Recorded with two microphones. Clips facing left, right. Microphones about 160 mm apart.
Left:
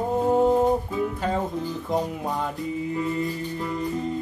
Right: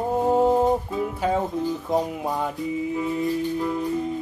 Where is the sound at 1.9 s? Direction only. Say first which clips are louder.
Left 1 dB; 5° right (ahead or behind).